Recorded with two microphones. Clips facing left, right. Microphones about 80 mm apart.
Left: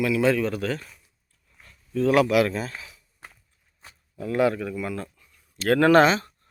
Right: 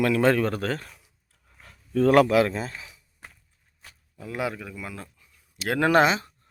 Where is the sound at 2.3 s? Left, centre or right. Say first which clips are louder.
Even; right.